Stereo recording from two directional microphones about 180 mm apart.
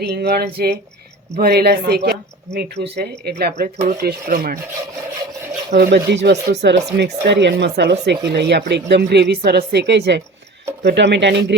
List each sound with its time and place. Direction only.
0.0 s speech: 65° right (ahead or behind)
5.7 s speech: 65° right (ahead or behind)